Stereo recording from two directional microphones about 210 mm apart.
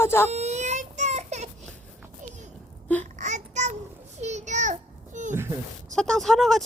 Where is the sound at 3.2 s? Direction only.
35° right (ahead or behind).